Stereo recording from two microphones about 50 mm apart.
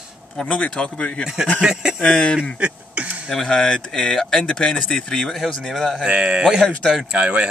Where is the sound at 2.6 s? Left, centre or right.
Right.